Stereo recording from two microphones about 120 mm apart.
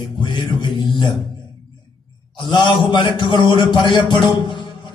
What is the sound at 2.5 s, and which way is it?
A man's voice, 40° left (ahead or behind).